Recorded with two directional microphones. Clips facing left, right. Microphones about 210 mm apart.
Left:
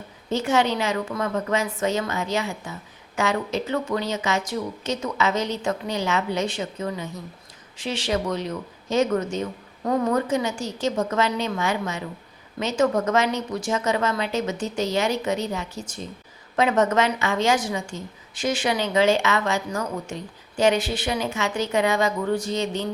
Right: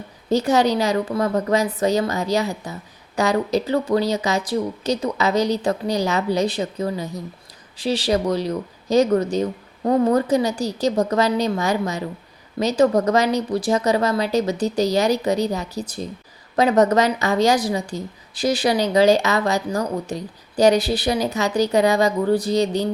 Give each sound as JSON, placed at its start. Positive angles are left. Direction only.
{"t": 0.3, "sound": "a woman's voice", "side_deg": -35}